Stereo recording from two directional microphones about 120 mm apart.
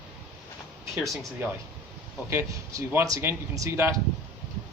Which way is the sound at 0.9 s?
Centre (ahead or behind).